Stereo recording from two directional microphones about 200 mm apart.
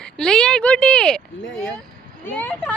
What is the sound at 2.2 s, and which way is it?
Speech, 10° left (ahead or behind).